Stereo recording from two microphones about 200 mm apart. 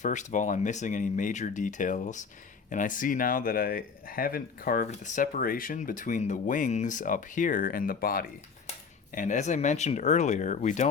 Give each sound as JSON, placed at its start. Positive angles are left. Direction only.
{"t": 0.0, "sound": "speech", "side_deg": 40}